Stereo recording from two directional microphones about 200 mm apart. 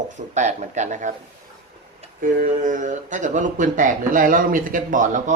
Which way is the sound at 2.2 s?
45° right (ahead or behind).